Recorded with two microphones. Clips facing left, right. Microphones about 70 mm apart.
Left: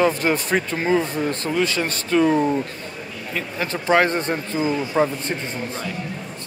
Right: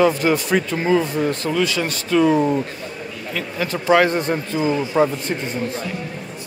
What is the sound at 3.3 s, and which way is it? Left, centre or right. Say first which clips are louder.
Speech: right 2 dB; left.